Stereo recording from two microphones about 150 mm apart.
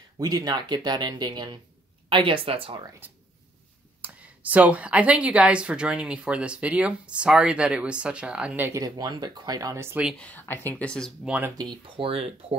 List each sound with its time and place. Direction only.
0.2 s speech: 25° right (ahead or behind)
4.0 s speech: 10° right (ahead or behind)
10.1 s speech: 10° left (ahead or behind)
11.2 s speech: 10° right (ahead or behind)
11.5 s speech: 30° right (ahead or behind)